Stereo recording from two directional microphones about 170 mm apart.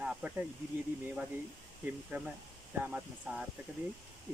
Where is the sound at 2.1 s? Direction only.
15° right (ahead or behind).